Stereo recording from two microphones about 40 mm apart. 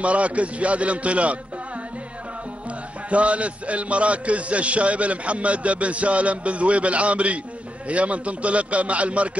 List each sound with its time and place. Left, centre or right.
0.0 s a man's voice: right
3.1 s a man's voice: right